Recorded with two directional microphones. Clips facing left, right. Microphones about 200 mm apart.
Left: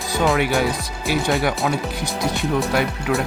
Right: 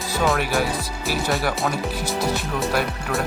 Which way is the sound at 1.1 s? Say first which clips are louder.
Left 4 dB; centre (ahead or behind).